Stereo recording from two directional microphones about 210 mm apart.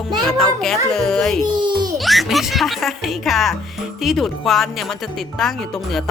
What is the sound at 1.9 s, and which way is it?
Speech, centre (ahead or behind).